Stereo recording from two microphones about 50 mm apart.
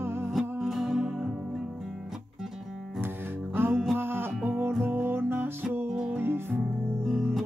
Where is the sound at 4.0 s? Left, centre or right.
Right.